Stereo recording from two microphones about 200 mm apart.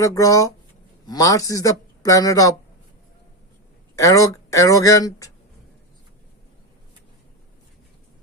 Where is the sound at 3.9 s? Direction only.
15° left (ahead or behind).